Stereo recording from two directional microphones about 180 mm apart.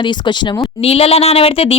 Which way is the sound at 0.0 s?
25° left (ahead or behind).